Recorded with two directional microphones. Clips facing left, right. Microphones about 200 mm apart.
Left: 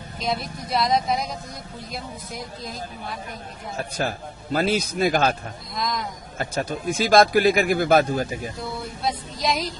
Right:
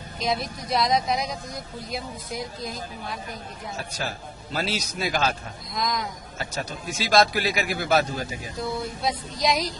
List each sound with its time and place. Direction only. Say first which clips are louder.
0.2 s a woman's voice: even; centre (ahead or behind)
3.7 s speech: left 7 dB; 50° left (ahead or behind)
5.8 s a woman's voice: even; centre (ahead or behind)
6.3 s speech: left 7 dB; 50° left (ahead or behind)
9.0 s a woman's voice: left 1 dB; centre (ahead or behind)